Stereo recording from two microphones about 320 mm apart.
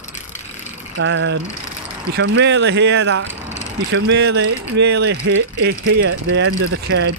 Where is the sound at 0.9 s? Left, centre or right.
Right.